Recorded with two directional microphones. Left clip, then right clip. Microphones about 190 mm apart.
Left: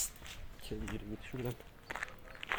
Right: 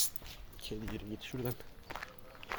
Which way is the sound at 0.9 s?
5° right (ahead or behind).